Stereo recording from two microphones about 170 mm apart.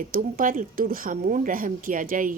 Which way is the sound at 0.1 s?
50° right (ahead or behind).